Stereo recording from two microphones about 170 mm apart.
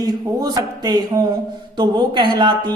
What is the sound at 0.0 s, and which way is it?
Speech, 25° right (ahead or behind).